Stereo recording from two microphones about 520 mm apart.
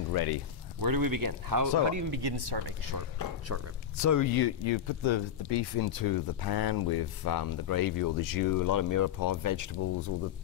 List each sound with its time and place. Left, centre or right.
0.1 s speech: left
0.7 s speech: right
2.2 s speech: right
3.9 s speech: left
4.6 s speech: left